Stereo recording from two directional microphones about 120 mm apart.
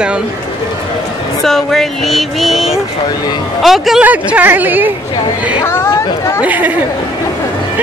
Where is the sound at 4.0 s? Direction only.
15° right (ahead or behind).